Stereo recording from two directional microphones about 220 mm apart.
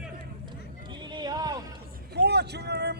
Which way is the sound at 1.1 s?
20° right (ahead or behind).